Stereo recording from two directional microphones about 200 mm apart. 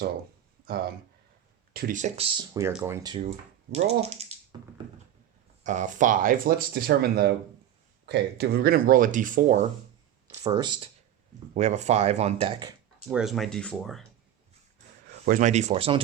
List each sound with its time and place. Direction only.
1.7 s speech: 40° right (ahead or behind)
5.6 s speech: 40° right (ahead or behind)
10.4 s speech: 20° right (ahead or behind)
11.5 s speech: 35° right (ahead or behind)
13.1 s speech: centre (ahead or behind)
15.2 s speech: 40° right (ahead or behind)